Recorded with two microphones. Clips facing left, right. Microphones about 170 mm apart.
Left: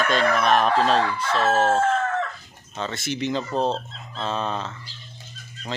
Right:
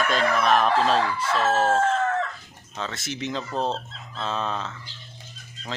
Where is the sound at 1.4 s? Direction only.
10° left (ahead or behind).